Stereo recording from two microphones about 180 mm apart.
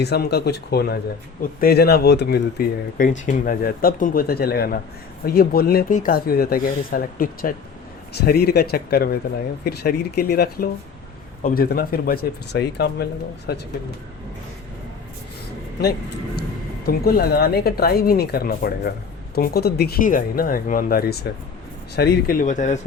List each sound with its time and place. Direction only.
0.0 s speech: 65° left (ahead or behind)
3.1 s speech: 45° left (ahead or behind); by 13.6 s 60° left (ahead or behind)
16.8 s speech: 55° left (ahead or behind)